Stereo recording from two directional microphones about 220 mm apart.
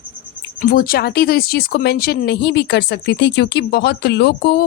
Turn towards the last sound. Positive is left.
turn(degrees=45)  # may be behind; listen again after turning